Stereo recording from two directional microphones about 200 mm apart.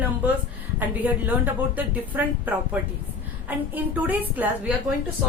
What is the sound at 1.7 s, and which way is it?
A woman's voice, 10° right (ahead or behind).